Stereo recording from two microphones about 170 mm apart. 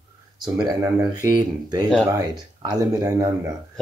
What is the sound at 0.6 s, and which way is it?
Speech, 20° right (ahead or behind).